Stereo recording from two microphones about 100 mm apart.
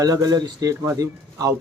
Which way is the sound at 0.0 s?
40° right (ahead or behind).